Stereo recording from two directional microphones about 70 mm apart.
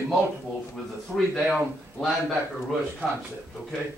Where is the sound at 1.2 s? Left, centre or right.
Centre.